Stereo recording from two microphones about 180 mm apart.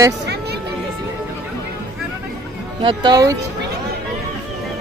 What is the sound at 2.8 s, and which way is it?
Speech, 25° right (ahead or behind).